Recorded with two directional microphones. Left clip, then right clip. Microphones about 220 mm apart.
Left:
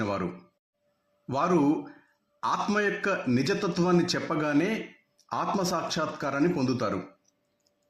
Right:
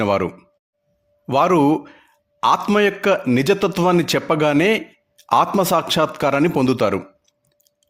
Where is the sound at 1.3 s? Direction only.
45° right (ahead or behind).